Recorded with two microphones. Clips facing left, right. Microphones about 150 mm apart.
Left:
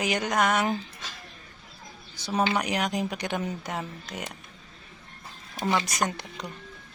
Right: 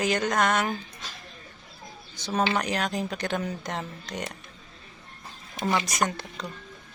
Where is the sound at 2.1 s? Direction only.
10° left (ahead or behind).